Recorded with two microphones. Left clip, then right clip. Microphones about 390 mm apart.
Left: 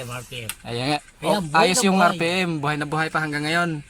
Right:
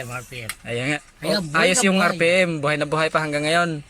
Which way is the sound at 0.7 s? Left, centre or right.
Centre.